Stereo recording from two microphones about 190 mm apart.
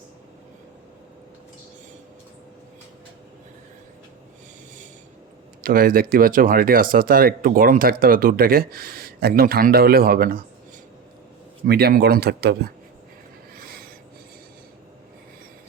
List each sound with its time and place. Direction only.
5.6 s speech: 50° right (ahead or behind)
11.6 s speech: 55° right (ahead or behind)